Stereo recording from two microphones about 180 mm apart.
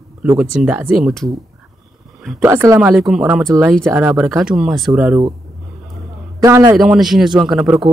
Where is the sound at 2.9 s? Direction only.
5° right (ahead or behind).